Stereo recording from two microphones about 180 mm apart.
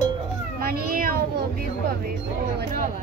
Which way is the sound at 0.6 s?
55° right (ahead or behind).